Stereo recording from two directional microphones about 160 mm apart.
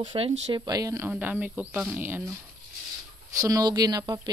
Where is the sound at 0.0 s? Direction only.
30° right (ahead or behind); by 2.3 s 10° right (ahead or behind).